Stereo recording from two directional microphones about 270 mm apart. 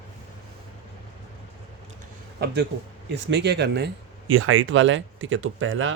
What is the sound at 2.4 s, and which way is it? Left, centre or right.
Speech, right.